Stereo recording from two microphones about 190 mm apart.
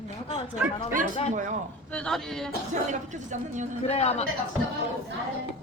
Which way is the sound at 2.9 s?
40° right (ahead or behind).